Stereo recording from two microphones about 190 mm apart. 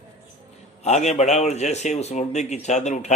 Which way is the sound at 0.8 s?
35° left (ahead or behind).